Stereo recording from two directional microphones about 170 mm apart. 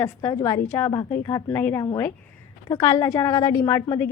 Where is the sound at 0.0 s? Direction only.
15° left (ahead or behind).